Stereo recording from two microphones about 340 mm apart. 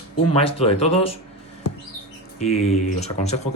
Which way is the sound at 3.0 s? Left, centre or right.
Centre.